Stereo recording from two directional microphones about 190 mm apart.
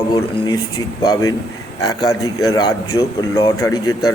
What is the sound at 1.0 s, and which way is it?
A man's voice, 20° left (ahead or behind).